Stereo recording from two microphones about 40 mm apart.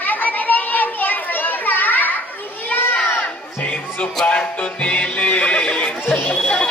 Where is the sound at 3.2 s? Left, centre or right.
Left.